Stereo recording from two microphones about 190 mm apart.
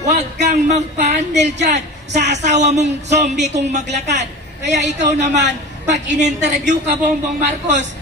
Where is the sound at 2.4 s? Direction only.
40° right (ahead or behind).